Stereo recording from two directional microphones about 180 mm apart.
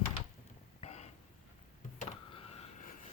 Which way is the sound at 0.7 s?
35° left (ahead or behind).